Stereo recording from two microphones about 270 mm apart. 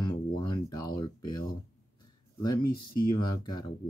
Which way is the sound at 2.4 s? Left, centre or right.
Centre.